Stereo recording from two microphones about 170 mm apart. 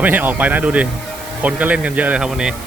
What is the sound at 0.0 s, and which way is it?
Speech, 10° right (ahead or behind).